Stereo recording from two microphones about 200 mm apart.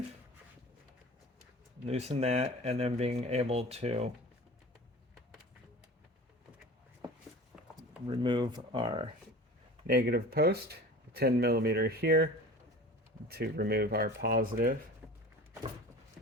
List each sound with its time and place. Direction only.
1.9 s speech: 30° right (ahead or behind)
7.8 s speech: 25° right (ahead or behind)
9.8 s speech: 50° right (ahead or behind)
15.0 s a sound: 5° right (ahead or behind)